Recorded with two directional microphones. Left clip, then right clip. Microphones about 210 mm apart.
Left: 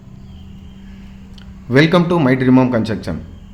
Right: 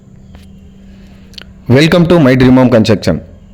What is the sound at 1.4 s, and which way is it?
A man's voice, 40° right (ahead or behind).